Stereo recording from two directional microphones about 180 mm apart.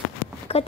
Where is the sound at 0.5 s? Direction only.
35° left (ahead or behind).